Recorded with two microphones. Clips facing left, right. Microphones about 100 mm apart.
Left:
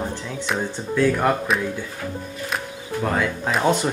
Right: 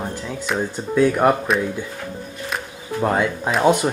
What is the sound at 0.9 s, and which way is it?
Speech, 15° right (ahead or behind).